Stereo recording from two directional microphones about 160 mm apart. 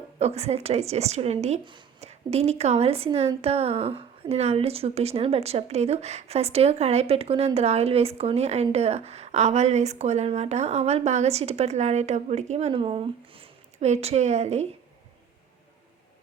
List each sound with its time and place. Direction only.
0.2 s speech: 40° right (ahead or behind)